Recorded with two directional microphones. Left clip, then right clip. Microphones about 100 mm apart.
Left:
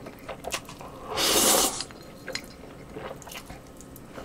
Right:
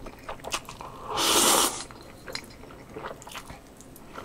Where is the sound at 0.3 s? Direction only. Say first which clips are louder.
Right 1 dB; 30° right (ahead or behind).